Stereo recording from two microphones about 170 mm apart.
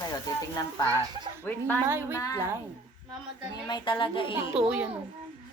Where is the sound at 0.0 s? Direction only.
20° left (ahead or behind).